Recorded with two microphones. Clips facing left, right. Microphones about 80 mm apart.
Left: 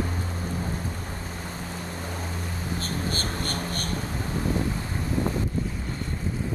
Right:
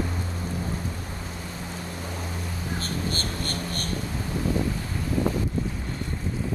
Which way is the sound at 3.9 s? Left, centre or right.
Left.